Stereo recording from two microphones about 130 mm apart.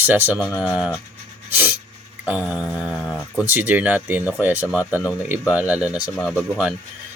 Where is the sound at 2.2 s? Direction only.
10° right (ahead or behind).